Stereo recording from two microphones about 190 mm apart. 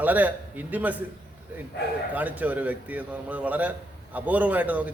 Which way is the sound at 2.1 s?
10° right (ahead or behind).